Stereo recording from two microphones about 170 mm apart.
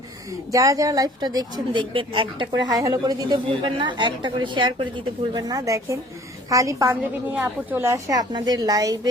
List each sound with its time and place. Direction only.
0.5 s a woman's voice: 20° right (ahead or behind)